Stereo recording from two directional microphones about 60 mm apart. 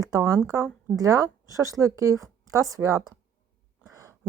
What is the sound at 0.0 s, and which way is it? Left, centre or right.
Speech, right.